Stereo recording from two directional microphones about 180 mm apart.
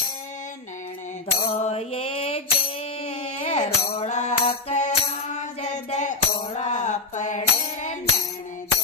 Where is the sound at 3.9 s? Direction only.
35° left (ahead or behind).